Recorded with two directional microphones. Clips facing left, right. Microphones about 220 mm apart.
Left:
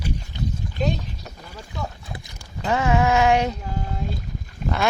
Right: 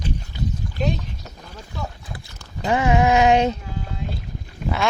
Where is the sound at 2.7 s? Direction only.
15° right (ahead or behind).